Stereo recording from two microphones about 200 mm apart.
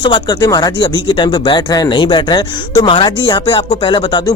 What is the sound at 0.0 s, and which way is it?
Speech, 20° left (ahead or behind).